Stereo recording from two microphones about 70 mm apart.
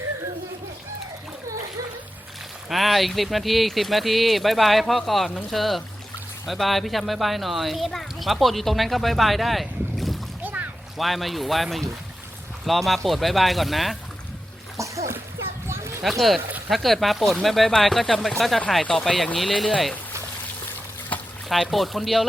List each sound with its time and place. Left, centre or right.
2.6 s speech: centre
10.4 s boat: right
10.9 s speech: centre
14.8 s splash: right
15.6 s a sound: right
16.0 s speech: centre
21.1 s trickle: left
21.5 s speech: centre